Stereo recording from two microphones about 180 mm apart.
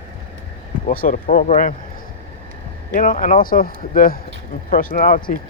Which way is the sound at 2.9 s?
50° left (ahead or behind).